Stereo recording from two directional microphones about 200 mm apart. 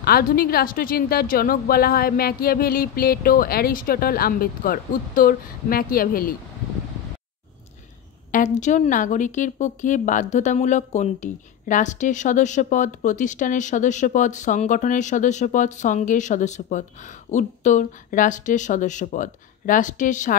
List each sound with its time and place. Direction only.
0.0 s a woman's voice: 45° left (ahead or behind)
8.3 s a woman's voice: 40° left (ahead or behind)